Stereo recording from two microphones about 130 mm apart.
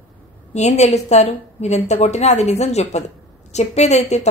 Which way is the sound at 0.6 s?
60° left (ahead or behind).